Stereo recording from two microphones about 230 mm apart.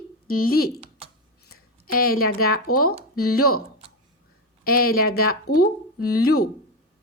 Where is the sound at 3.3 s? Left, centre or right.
Left.